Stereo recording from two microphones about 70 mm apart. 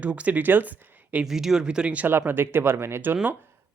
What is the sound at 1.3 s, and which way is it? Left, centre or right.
Speech, centre.